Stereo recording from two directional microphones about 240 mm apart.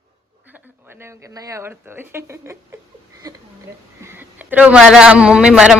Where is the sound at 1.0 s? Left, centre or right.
Centre.